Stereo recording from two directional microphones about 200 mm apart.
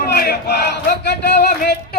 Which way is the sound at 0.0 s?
50° left (ahead or behind).